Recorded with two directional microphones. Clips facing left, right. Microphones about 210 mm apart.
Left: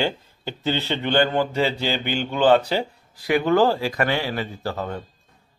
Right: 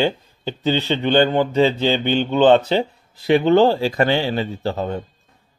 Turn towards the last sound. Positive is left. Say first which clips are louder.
# right 5 dB
turn(degrees=-25)  # may be behind; listen again after turning